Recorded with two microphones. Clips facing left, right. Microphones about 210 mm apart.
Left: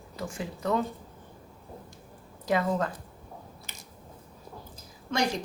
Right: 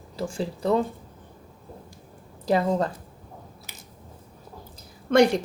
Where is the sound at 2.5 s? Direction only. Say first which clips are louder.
Right 4 dB; 35° right (ahead or behind).